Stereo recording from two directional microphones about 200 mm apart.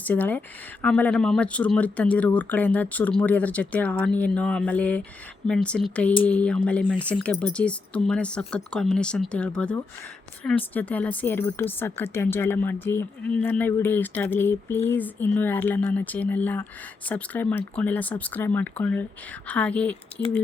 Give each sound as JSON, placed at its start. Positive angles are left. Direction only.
{"t": 0.0, "sound": "speech", "side_deg": 10}